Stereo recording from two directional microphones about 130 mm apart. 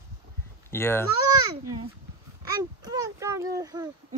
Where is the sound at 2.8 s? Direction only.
30° right (ahead or behind).